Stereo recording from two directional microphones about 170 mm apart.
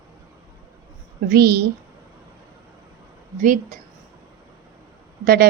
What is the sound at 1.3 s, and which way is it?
Speech, 70° right (ahead or behind).